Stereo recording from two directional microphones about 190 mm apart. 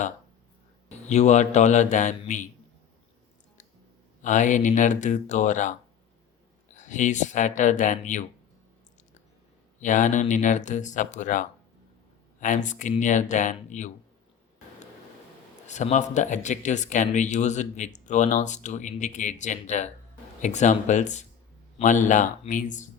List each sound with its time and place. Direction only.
0.9 s speech: 35° left (ahead or behind)
4.2 s speech: 40° left (ahead or behind)
6.7 s speech: 40° left (ahead or behind)
9.8 s speech: 40° left (ahead or behind)
15.6 s speech: 40° left (ahead or behind)